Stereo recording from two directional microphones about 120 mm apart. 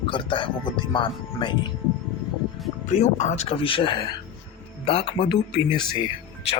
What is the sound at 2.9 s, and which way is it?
Speech, 80° left.